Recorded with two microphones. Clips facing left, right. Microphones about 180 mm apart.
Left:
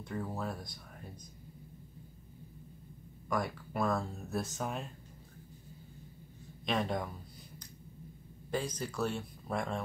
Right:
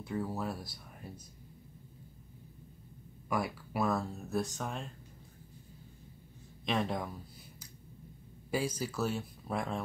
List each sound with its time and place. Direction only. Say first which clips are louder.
0.0 s speech: right 2 dB; 5° right (ahead or behind)
3.3 s speech: even; 5° right (ahead or behind)
6.6 s speech: even; centre (ahead or behind)
8.5 s speech: right 2 dB; 10° right (ahead or behind)